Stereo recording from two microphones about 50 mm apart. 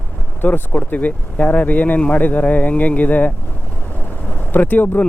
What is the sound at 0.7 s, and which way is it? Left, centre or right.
Speech, left.